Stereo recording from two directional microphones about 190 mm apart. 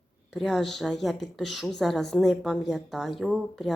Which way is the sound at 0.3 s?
Centre (ahead or behind).